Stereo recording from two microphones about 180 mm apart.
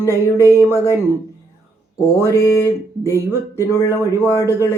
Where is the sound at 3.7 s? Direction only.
15° left (ahead or behind).